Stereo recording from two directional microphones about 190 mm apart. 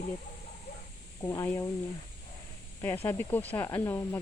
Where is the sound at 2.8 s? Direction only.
10° left (ahead or behind).